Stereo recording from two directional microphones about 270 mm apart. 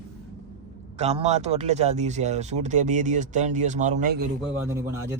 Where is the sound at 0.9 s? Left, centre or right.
Right.